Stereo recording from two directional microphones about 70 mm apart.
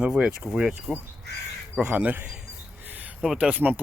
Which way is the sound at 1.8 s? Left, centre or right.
Centre.